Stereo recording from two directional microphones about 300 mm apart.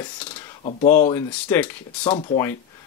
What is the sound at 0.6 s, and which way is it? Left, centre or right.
Speech, left.